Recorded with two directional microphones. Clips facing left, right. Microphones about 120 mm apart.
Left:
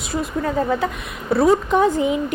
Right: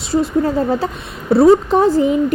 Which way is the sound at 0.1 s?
30° right (ahead or behind).